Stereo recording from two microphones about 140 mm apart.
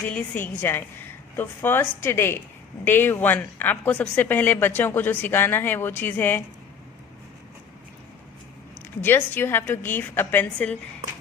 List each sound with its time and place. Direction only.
0.1 s speech: 10° left (ahead or behind)
9.0 s speech: 15° left (ahead or behind)